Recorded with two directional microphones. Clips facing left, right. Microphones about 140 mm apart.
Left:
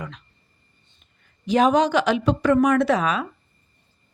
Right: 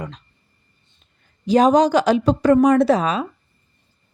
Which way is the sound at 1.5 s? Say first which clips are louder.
Right 4 dB; 35° right (ahead or behind).